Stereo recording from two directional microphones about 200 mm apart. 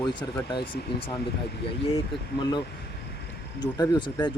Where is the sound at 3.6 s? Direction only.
20° left (ahead or behind).